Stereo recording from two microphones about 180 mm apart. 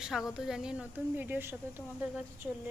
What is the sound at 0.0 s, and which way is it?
Speech, centre (ahead or behind).